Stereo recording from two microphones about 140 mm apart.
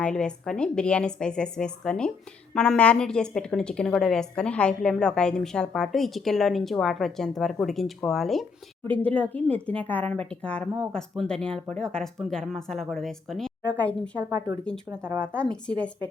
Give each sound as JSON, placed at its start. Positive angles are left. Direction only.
{"t": 0.0, "sound": "a woman's voice", "side_deg": 5}
{"t": 14.3, "sound": "speech", "side_deg": -25}
{"t": 15.4, "sound": "a woman's voice", "side_deg": 5}